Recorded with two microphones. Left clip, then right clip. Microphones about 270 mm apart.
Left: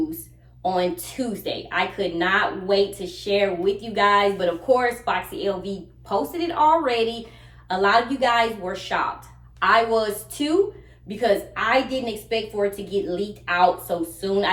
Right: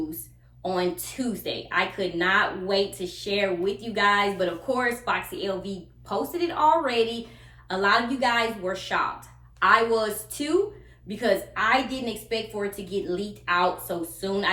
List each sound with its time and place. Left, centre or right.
0.6 s a woman's voice: centre